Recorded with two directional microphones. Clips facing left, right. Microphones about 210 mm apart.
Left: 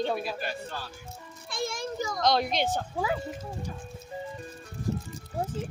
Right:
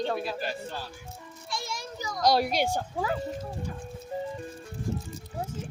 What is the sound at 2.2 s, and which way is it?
Speech, 10° right (ahead or behind).